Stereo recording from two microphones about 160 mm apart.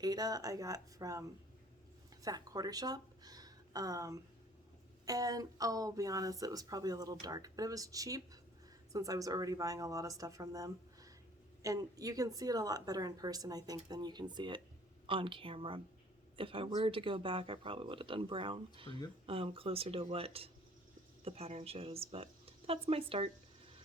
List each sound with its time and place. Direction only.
0.0 s speech: 25° right (ahead or behind)
2.2 s speech: 25° right (ahead or behind)